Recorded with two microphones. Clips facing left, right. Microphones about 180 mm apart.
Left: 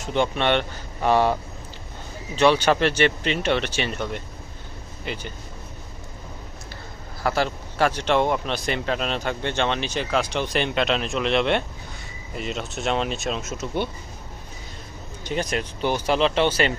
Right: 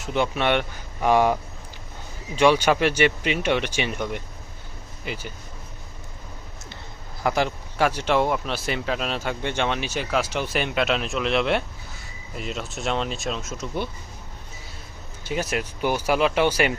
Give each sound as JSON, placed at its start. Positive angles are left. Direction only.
{"t": 0.0, "sound": "speech", "side_deg": -5}
{"t": 7.2, "sound": "speech", "side_deg": -15}
{"t": 15.2, "sound": "speech", "side_deg": -5}